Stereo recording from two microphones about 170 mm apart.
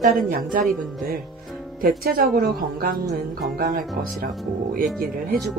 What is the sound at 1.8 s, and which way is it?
A woman's voice, 60° right (ahead or behind).